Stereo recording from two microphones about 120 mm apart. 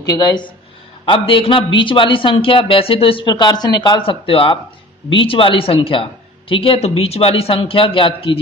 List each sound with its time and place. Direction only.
0.0 s speech: 35° left (ahead or behind)
1.0 s a man's voice: 45° left (ahead or behind)